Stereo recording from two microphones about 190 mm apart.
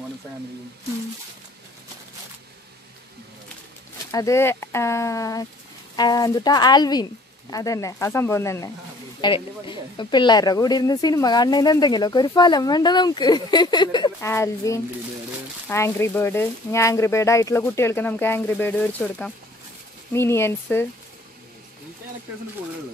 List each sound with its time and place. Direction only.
4.1 s speech: 15° left (ahead or behind)